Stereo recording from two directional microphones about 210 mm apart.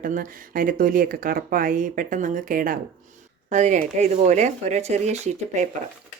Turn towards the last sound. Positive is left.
turn(degrees=-35)  # may be behind; listen again after turning